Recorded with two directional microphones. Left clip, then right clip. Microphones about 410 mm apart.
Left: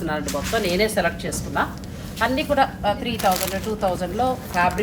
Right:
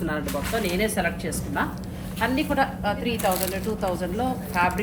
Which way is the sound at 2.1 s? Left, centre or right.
Left.